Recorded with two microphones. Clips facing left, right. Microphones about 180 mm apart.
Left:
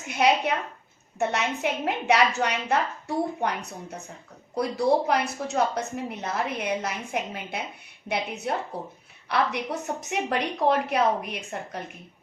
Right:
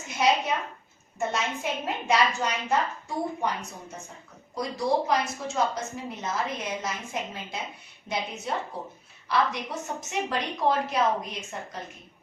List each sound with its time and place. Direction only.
0.1 s a woman's voice: 60° left (ahead or behind)